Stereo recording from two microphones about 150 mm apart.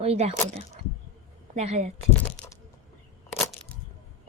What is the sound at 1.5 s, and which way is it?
Speech, 45° right (ahead or behind).